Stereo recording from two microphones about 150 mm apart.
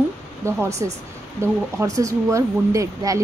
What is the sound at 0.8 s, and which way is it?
Speech, 20° right (ahead or behind).